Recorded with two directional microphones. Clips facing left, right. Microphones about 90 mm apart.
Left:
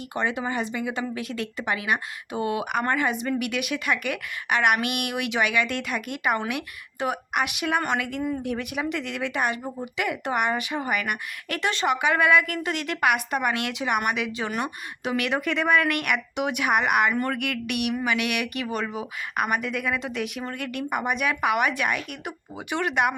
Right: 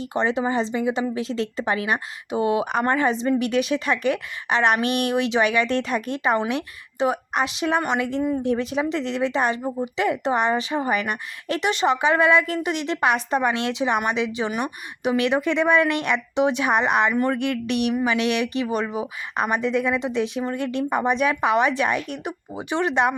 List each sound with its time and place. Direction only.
0.0 s speech: 25° right (ahead or behind)